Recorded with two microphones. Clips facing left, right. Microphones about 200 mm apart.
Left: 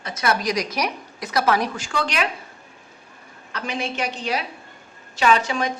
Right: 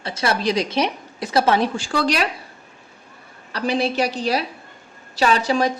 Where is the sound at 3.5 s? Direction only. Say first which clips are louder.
Right 7 dB; 35° right (ahead or behind).